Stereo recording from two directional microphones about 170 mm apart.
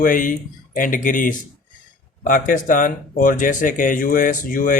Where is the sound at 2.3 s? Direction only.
50° left (ahead or behind).